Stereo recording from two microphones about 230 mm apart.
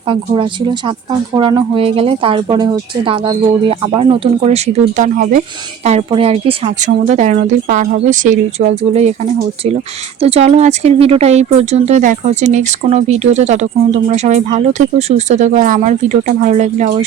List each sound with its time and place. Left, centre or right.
0.1 s speech: right
10.2 s speech: right